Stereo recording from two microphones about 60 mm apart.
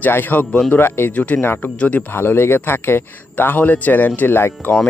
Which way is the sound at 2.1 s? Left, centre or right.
Left.